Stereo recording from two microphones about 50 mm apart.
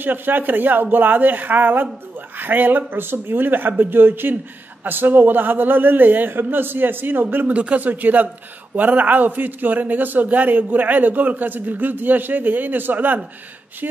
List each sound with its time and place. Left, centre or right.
0.0 s a man's voice: right
7.5 s a man's voice: right